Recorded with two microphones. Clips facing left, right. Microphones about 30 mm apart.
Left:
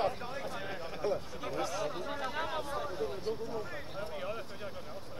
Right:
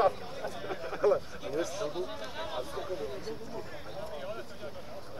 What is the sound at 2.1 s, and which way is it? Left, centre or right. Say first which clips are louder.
Chatter: left 4 dB; left.